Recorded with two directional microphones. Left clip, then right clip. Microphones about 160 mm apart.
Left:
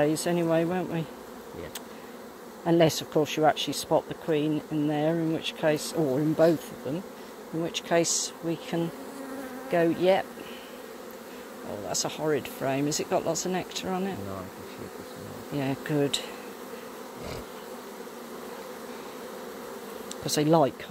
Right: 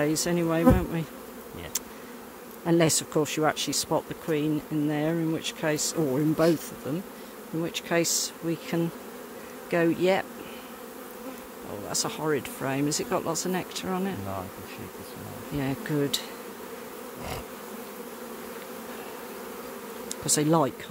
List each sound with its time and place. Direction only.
0.0 s speech: 20° right (ahead or behind)
2.6 s speech: 20° right (ahead or behind)
7.6 s speech: 20° right (ahead or behind)
11.9 s speech: 20° right (ahead or behind)
15.5 s speech: 10° right (ahead or behind)
20.2 s speech: 15° right (ahead or behind)